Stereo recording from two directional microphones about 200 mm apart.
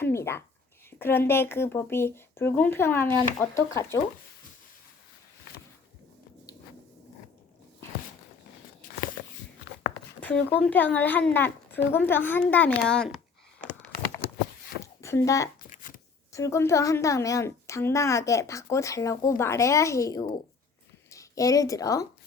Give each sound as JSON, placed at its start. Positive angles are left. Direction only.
{"t": 0.0, "sound": "a sound", "side_deg": 15}
{"t": 0.9, "sound": "a child's voice", "side_deg": 10}
{"t": 10.2, "sound": "a child's voice", "side_deg": 10}
{"t": 15.0, "sound": "a child's voice", "side_deg": 15}